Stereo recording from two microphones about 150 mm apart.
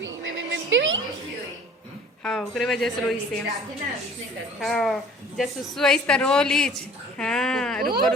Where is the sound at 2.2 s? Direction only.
Centre (ahead or behind).